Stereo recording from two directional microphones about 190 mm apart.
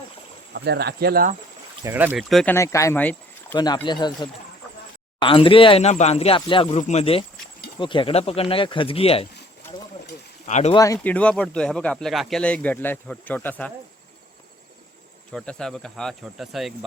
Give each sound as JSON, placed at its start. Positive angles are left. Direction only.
{"t": 0.5, "sound": "speech", "side_deg": -60}
{"t": 1.8, "sound": "cricket", "side_deg": -10}
{"t": 2.6, "sound": "speech", "side_deg": 15}
{"t": 3.5, "sound": "speech", "side_deg": 20}
{"t": 10.4, "sound": "speech", "side_deg": 40}
{"t": 10.7, "sound": "speech", "side_deg": 15}
{"t": 15.3, "sound": "cricket", "side_deg": 5}